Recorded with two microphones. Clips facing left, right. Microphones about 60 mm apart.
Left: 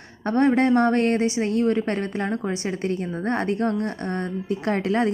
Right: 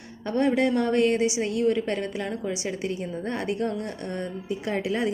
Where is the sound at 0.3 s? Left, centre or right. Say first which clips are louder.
Left 4 dB; left.